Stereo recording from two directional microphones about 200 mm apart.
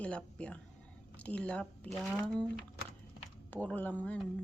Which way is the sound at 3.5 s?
10° left (ahead or behind).